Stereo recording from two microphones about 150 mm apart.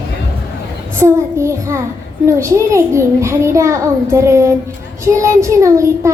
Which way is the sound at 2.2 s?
20° right (ahead or behind).